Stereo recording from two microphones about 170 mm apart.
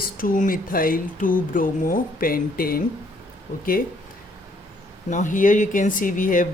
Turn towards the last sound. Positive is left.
turn(degrees=50)  # may be behind; listen again after turning